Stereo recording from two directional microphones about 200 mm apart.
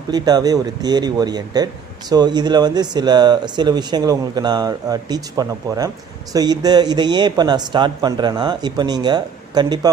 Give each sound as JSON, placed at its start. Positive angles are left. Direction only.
{"t": 0.1, "sound": "speech", "side_deg": -20}